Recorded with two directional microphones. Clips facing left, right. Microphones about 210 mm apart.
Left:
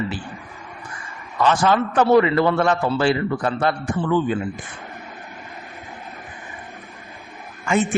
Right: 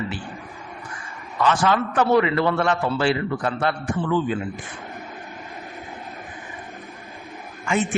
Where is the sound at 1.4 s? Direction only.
35° left (ahead or behind).